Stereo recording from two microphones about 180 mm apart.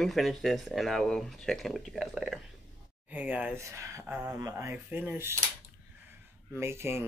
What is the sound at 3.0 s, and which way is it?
Speech, 10° right (ahead or behind).